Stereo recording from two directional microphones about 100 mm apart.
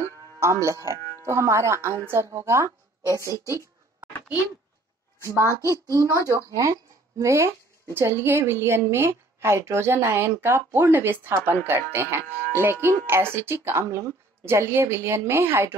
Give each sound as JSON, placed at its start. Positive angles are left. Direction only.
{"t": 0.0, "sound": "music", "side_deg": -30}
{"t": 1.2, "sound": "speech", "side_deg": -30}
{"t": 5.4, "sound": "a child's voice", "side_deg": -30}